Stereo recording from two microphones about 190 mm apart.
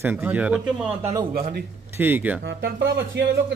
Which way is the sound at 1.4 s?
50° right (ahead or behind).